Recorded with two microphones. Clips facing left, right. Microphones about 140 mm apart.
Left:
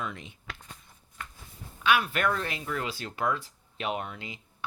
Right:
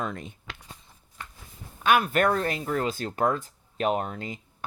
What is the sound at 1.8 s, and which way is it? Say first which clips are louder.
Speech: right 4 dB; 45° right (ahead or behind).